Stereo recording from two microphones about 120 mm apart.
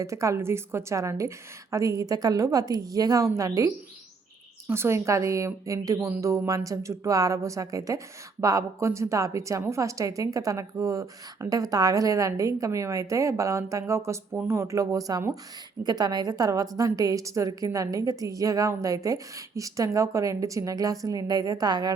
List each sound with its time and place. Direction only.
0.0 s speech: 25° right (ahead or behind)
4.7 s speech: 20° right (ahead or behind)